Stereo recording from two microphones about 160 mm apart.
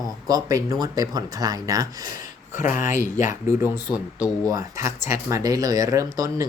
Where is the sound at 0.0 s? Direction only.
25° right (ahead or behind).